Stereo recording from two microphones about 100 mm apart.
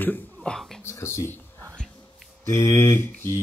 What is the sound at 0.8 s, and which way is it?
Speech, 25° left (ahead or behind).